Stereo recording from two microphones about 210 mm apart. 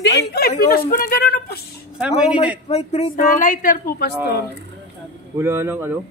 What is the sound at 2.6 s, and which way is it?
A man's voice, 30° left (ahead or behind).